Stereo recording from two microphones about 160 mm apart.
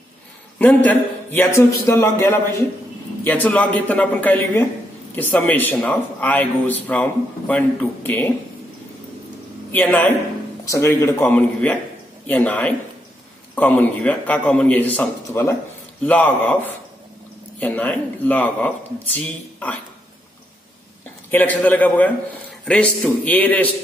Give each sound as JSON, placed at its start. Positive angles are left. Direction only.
{"t": 0.8, "sound": "a man's voice", "side_deg": 10}
{"t": 9.7, "sound": "a man's voice", "side_deg": 10}
{"t": 21.3, "sound": "a man's voice", "side_deg": 10}